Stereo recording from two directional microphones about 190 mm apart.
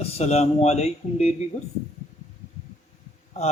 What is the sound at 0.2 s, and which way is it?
A man's voice, 35° left (ahead or behind).